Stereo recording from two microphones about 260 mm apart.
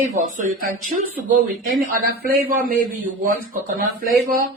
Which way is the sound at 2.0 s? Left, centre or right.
Right.